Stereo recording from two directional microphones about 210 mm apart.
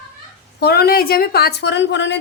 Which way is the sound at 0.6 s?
50° left (ahead or behind).